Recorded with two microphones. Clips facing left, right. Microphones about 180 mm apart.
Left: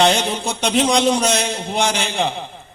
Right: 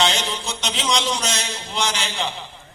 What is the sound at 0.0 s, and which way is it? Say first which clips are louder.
Speech: left 6 dB; 55° left (ahead or behind).